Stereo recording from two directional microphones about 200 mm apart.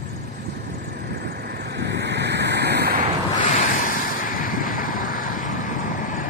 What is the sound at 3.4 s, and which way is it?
Vehicle, 40° left (ahead or behind).